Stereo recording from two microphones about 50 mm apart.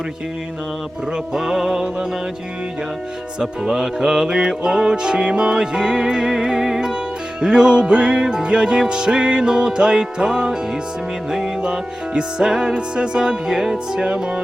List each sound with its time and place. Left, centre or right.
1.1 s music: centre
3.4 s music: centre